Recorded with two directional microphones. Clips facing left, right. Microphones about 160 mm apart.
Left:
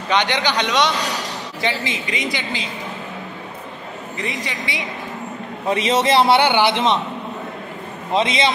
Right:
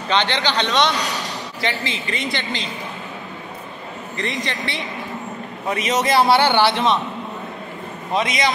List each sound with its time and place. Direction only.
0.1 s a man's voice: 15° left (ahead or behind)
4.2 s a man's voice: 10° left (ahead or behind)
5.7 s a man's voice: 25° left (ahead or behind)
8.1 s a man's voice: 25° left (ahead or behind)